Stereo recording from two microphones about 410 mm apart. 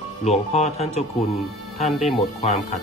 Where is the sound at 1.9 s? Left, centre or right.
Centre.